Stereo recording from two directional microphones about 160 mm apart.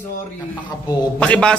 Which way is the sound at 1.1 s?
5° left (ahead or behind).